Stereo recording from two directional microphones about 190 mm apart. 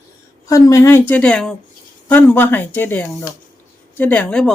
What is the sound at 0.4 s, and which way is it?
Speech, 15° left (ahead or behind).